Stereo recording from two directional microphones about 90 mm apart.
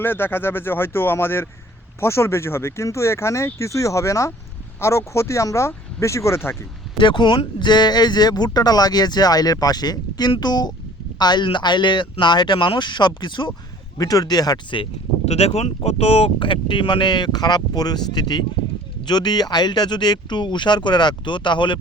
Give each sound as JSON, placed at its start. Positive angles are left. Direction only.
{"t": 0.0, "sound": "speech", "side_deg": 25}
{"t": 7.0, "sound": "speech", "side_deg": 60}
{"t": 14.0, "sound": "speech", "side_deg": 45}
{"t": 16.0, "sound": "speech", "side_deg": 90}